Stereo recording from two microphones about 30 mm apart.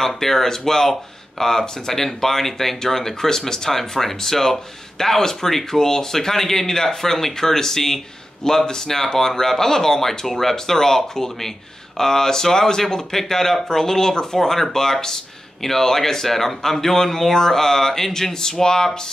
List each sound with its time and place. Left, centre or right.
0.0 s speech: centre